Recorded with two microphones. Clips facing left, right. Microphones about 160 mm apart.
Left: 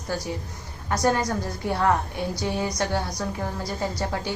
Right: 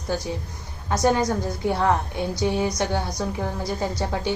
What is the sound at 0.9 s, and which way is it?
A woman's voice, 15° right (ahead or behind).